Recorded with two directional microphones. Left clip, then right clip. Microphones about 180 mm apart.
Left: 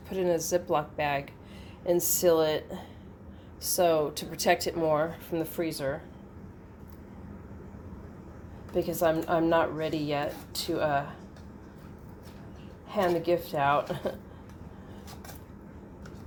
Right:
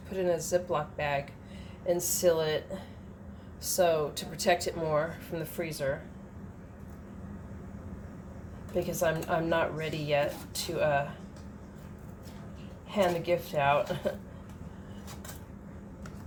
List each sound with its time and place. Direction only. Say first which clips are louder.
0.1 s speech: left 1 dB; 45° left (ahead or behind)
3.8 s speech: left 2 dB; 45° left (ahead or behind)
8.7 s speech: left 3 dB; 40° left (ahead or behind)
12.9 s speech: left 1 dB; 40° left (ahead or behind)